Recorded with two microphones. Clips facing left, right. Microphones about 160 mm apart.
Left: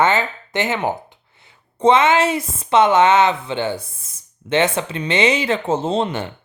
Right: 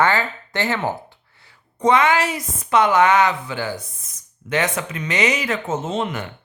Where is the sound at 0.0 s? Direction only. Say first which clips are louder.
Left 2 dB; 20° left (ahead or behind).